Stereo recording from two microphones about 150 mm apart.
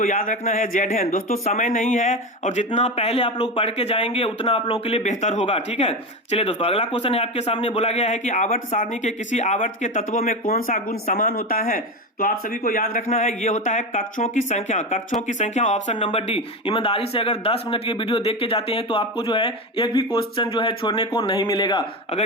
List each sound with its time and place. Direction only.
0.0 s a man's voice: 60° left (ahead or behind)
11.0 s a man's voice: 55° left (ahead or behind)
16.0 s speech: 40° left (ahead or behind)